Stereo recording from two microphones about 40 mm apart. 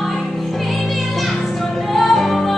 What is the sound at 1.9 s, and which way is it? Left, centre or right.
Music, centre.